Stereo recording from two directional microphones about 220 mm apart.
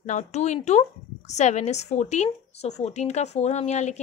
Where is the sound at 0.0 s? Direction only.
30° left (ahead or behind).